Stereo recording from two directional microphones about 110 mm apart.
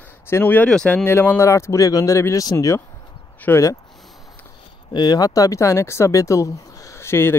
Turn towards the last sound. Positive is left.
turn(degrees=25)  # may be behind; listen again after turning